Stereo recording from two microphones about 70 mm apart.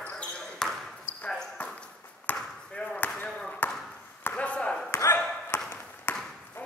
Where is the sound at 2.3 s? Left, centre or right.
Centre.